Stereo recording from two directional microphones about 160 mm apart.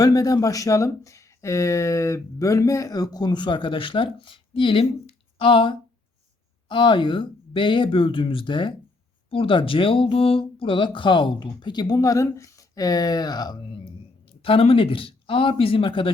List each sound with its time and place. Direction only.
0.0 s speech: 20° left (ahead or behind)